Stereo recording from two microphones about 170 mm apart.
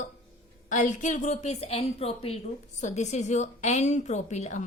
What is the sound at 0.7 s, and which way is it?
A woman's voice, 45° left (ahead or behind).